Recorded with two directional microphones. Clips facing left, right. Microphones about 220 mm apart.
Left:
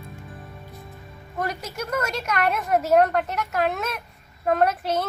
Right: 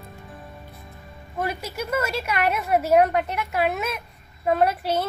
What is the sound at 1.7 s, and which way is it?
A woman's voice, 5° right (ahead or behind).